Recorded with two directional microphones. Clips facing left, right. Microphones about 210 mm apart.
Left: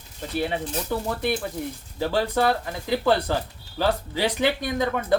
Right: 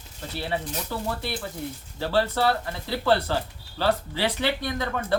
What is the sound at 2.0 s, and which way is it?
Speech, 15° left (ahead or behind).